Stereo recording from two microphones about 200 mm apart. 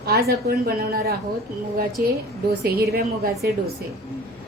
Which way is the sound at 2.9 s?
50° right (ahead or behind).